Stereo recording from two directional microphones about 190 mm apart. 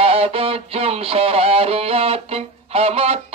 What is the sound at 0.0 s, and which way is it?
Music, 30° right (ahead or behind).